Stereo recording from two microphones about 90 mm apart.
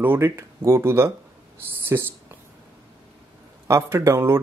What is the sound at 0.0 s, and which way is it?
A man's voice, 25° right (ahead or behind).